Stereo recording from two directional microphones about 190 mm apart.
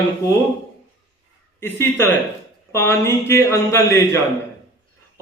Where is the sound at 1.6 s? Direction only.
10° left (ahead or behind).